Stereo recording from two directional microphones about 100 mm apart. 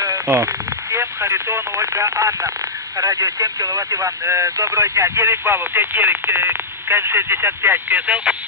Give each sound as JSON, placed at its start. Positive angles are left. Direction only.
{"t": 0.0, "sound": "speech", "side_deg": -30}